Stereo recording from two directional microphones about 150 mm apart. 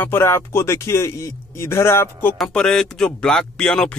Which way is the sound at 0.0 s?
15° left (ahead or behind).